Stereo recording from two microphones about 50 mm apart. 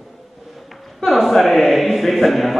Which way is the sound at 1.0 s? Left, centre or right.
Centre.